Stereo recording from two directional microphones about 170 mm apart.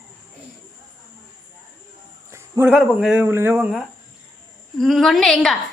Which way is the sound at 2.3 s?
15° right (ahead or behind).